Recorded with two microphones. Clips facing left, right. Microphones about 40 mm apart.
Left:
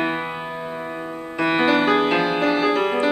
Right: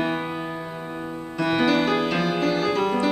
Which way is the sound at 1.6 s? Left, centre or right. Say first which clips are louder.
Left 3 dB; left.